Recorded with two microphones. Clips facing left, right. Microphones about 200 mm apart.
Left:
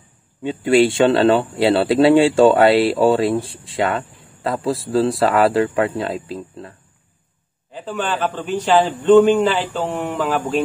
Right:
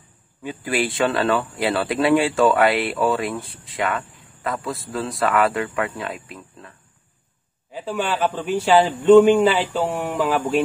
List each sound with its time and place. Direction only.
0.4 s speech: 25° left (ahead or behind)
7.7 s a man's voice: 10° right (ahead or behind)